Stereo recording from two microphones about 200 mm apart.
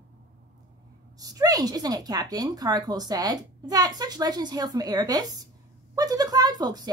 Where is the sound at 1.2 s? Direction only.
20° right (ahead or behind).